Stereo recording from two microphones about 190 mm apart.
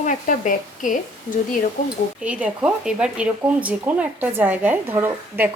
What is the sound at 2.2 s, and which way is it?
Speech, 5° right (ahead or behind).